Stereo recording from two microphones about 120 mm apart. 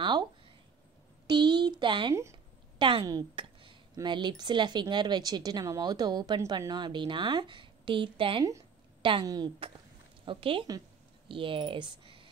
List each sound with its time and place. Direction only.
0.0 s a sound: 40° right (ahead or behind)
2.8 s a woman's voice: 45° right (ahead or behind)
9.2 s speech: 30° right (ahead or behind)
10.2 s a woman's voice: 45° right (ahead or behind)